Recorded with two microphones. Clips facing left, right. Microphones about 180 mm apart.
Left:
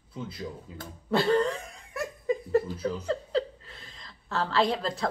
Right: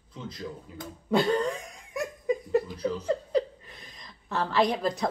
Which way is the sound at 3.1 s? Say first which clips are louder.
Right 3 dB; 15° right (ahead or behind).